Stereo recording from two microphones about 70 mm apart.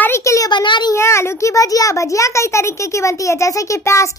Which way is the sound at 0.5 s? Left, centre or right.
Left.